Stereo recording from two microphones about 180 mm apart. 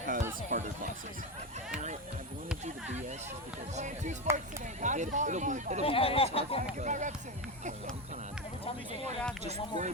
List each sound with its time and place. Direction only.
0.0 s a sound: 45° right (ahead or behind)
3.8 s speech: 40° right (ahead or behind)
5.8 s speech: 30° left (ahead or behind)
6.7 s speech: 45° right (ahead or behind)
9.4 s speech: 40° right (ahead or behind)